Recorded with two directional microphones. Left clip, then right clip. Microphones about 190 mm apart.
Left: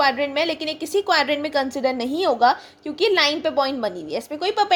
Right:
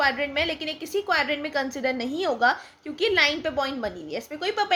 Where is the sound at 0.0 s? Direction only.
25° left (ahead or behind).